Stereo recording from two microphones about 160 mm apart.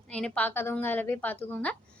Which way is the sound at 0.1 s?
5° left (ahead or behind).